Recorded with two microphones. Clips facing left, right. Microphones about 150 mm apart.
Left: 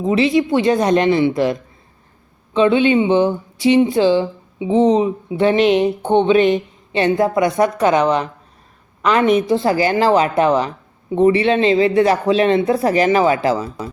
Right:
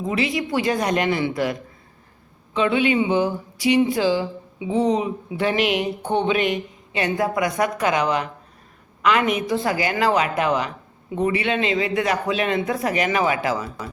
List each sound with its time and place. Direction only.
0.0 s speech: 25° left (ahead or behind)